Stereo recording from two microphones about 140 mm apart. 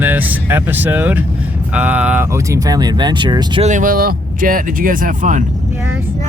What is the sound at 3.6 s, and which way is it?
Speech, 60° right (ahead or behind).